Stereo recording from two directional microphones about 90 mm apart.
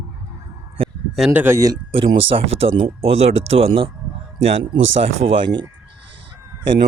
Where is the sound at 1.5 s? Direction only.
40° right (ahead or behind).